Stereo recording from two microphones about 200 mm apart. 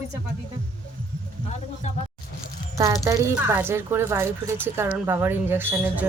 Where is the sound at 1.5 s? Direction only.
35° left (ahead or behind).